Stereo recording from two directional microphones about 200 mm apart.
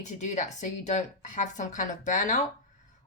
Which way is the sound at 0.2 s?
35° left (ahead or behind).